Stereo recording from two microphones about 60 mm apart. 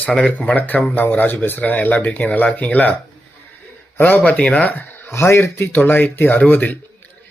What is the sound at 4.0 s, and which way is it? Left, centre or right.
Speech, left.